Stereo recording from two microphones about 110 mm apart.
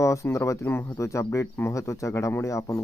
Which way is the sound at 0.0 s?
30° left (ahead or behind).